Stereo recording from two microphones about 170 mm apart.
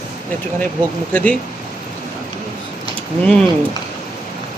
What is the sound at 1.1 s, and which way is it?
Speech, 5° left (ahead or behind).